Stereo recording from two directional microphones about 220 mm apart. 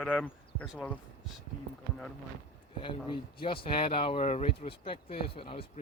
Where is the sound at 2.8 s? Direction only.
25° left (ahead or behind).